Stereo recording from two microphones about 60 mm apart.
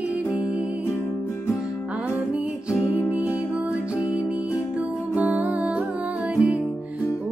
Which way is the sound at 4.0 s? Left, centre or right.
Left.